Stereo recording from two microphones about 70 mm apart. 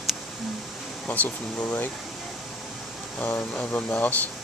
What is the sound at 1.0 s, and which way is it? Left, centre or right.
Speech, left.